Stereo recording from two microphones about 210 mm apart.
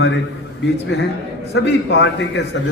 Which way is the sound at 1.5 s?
55° left (ahead or behind).